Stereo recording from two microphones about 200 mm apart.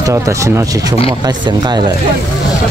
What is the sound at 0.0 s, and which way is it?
Speech, 15° right (ahead or behind).